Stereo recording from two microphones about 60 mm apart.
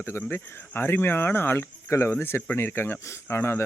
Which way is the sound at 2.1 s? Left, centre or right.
Left.